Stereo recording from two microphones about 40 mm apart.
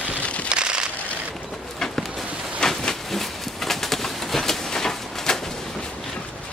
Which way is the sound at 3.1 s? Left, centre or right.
Centre.